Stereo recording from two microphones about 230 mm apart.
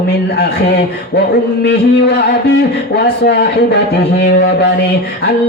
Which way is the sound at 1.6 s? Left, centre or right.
Left.